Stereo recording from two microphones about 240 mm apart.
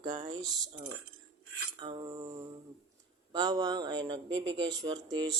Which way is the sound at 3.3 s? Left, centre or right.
Centre.